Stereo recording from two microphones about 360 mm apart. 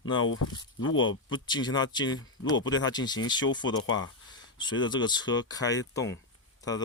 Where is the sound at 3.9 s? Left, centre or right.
Left.